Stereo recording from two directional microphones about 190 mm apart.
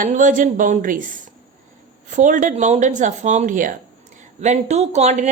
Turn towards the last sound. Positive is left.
turn(degrees=-35)  # may be behind; listen again after turning